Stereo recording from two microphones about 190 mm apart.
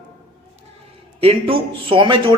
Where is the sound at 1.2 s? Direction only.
30° right (ahead or behind).